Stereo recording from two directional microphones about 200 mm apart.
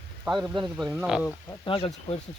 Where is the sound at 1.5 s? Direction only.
25° left (ahead or behind).